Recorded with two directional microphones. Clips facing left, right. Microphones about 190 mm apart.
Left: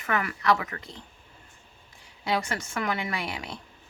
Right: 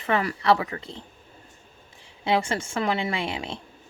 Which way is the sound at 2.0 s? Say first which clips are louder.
Right 4 dB; 25° right (ahead or behind).